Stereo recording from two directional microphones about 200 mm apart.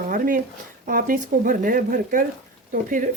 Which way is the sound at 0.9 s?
45° right (ahead or behind).